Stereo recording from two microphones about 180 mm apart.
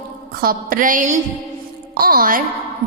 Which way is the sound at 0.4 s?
50° right (ahead or behind).